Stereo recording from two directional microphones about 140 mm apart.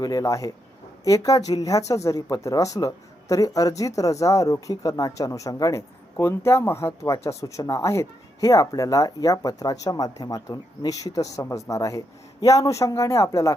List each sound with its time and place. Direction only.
0.0 s speech: 25° left (ahead or behind)